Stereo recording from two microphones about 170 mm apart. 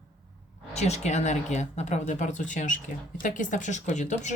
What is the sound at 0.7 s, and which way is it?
A woman's voice, 40° left (ahead or behind).